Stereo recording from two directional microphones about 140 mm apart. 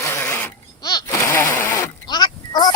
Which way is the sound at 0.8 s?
30° left (ahead or behind).